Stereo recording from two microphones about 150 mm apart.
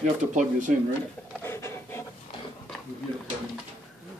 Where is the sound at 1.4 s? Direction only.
15° left (ahead or behind).